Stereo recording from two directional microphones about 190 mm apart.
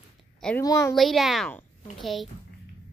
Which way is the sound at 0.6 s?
15° left (ahead or behind).